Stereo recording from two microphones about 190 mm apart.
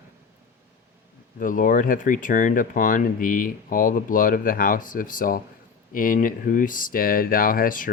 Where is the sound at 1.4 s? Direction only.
45° left (ahead or behind).